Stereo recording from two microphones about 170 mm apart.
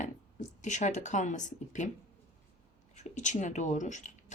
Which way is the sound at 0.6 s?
45° left (ahead or behind).